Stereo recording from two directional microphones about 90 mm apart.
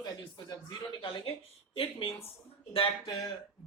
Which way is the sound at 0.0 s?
45° left (ahead or behind).